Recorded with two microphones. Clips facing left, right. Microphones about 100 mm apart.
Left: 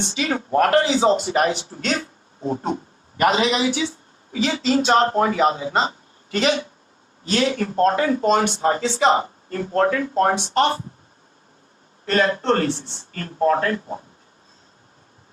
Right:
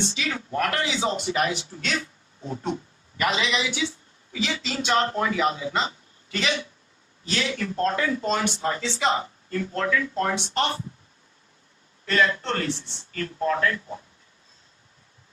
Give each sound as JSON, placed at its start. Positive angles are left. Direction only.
{"t": 0.0, "sound": "a woman's voice", "side_deg": 45}
{"t": 12.0, "sound": "speech", "side_deg": 40}